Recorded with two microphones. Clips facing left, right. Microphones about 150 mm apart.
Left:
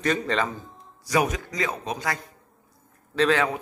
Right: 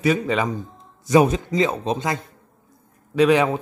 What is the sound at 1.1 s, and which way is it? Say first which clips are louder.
Speech: right 8 dB; 25° right (ahead or behind).